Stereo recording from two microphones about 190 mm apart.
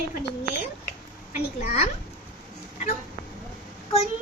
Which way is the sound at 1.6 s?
35° left (ahead or behind).